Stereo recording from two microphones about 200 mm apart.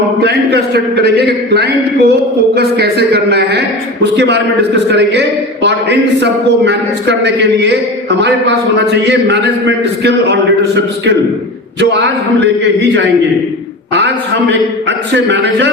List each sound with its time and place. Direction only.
0.2 s a man's voice: 55° right (ahead or behind)
11.8 s a man's voice: 60° right (ahead or behind)
14.5 s a man's voice: 60° right (ahead or behind)